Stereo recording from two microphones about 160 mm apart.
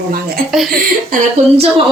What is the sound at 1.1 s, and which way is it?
Speech, 55° right (ahead or behind).